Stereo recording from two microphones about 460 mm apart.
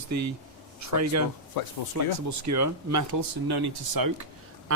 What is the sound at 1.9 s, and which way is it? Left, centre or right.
Speech, right.